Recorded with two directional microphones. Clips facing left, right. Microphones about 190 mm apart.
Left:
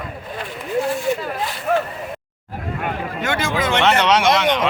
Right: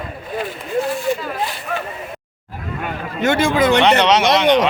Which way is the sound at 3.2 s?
30° right (ahead or behind).